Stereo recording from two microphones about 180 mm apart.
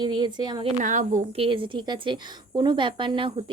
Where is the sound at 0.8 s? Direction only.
45° right (ahead or behind).